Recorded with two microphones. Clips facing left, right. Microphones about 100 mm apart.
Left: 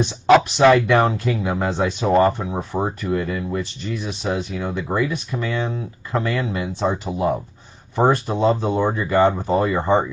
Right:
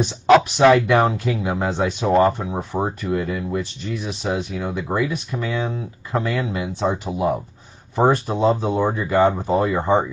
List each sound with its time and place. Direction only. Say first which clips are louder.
0.0 s speech: even; 5° right (ahead or behind)